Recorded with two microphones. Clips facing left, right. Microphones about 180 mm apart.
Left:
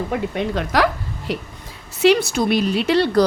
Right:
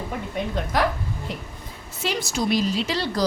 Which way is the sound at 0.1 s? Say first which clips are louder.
Left 6 dB; 90° left.